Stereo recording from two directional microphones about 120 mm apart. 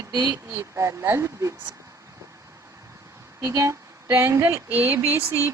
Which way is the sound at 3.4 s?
25° right (ahead or behind).